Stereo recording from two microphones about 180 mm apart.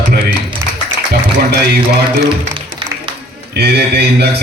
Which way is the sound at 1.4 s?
60° right (ahead or behind).